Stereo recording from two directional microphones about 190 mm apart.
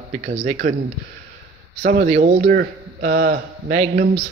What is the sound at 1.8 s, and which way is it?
Speech, 45° right (ahead or behind).